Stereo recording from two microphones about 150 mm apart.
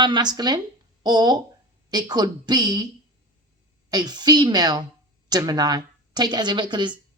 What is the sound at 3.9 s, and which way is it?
A woman's voice, 30° right (ahead or behind).